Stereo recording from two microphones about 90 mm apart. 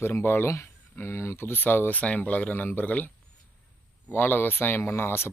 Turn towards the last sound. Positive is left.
turn(degrees=25)  # may be behind; listen again after turning